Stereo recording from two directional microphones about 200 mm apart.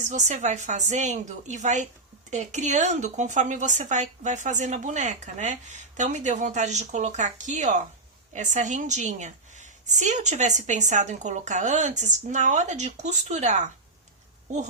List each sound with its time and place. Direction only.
0.0 s a woman's voice: 35° right (ahead or behind)